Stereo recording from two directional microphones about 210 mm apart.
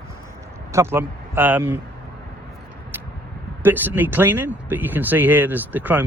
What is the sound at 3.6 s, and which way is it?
Speech, 10° right (ahead or behind).